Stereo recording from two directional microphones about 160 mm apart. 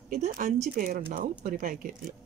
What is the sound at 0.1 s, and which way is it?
A woman's voice, 50° right (ahead or behind).